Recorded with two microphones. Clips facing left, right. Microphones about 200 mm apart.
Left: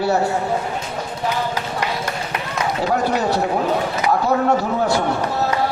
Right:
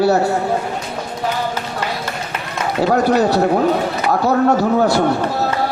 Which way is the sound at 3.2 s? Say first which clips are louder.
Right 5 dB; 40° right (ahead or behind).